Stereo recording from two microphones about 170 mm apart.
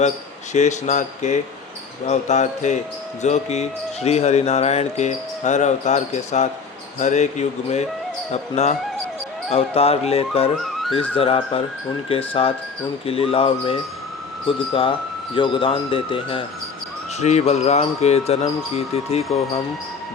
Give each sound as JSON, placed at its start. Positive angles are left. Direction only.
{"t": 0.5, "sound": "speech", "side_deg": 45}